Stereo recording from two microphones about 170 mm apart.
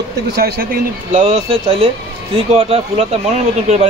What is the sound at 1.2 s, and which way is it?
A man's voice, 35° right (ahead or behind).